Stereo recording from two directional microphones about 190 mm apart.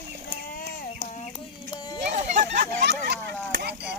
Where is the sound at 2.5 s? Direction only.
65° right (ahead or behind).